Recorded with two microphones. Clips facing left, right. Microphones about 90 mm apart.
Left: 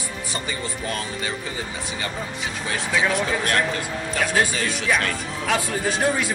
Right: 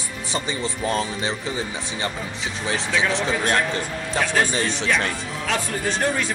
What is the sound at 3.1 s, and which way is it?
Speech, 25° right (ahead or behind).